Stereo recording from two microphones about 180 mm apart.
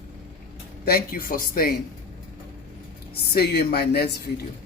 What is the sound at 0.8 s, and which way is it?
Speech, 55° left (ahead or behind).